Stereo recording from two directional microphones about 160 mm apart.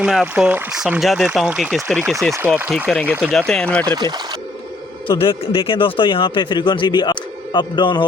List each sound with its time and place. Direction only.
0.0 s speech: 5° right (ahead or behind)
2.3 s speech: 10° right (ahead or behind)
3.3 s speech: 5° left (ahead or behind)
3.8 s speech: 25° right (ahead or behind)
5.0 s speech: 35° left (ahead or behind)